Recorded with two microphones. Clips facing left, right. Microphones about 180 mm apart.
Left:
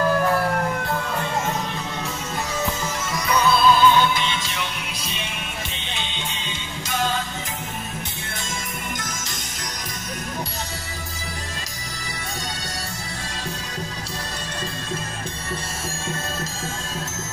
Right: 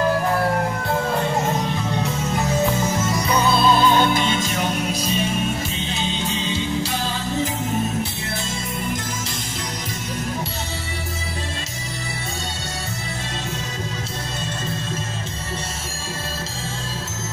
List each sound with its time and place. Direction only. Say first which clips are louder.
3.1 s music: left 2 dB; 25° right (ahead or behind)
3.7 s music: right 1 dB; 40° right (ahead or behind)